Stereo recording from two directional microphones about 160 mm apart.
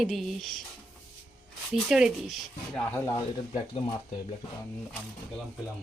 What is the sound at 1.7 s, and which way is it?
Speech, 5° right (ahead or behind).